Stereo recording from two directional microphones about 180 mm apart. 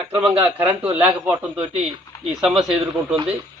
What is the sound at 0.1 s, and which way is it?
Speech, 10° right (ahead or behind).